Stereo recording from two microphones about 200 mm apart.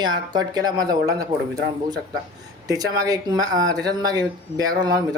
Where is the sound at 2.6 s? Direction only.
20° right (ahead or behind).